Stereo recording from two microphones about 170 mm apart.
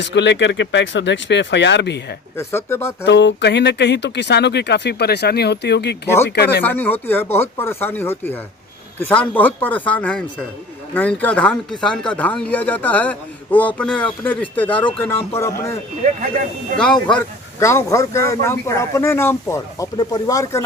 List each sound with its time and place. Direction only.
0.0 s speech: 90° left
2.3 s speech: 15° left (ahead or behind)
3.0 s speech: 90° left; by 6.6 s 70° left (ahead or behind)
6.6 s speech: 10° left (ahead or behind)
16.7 s speech: 5° left (ahead or behind)
17.6 s speech: 15° left (ahead or behind)